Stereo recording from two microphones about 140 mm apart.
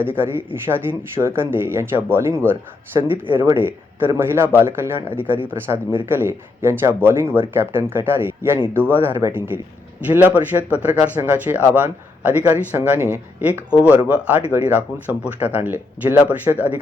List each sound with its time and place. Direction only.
0.0 s speech: 15° right (ahead or behind)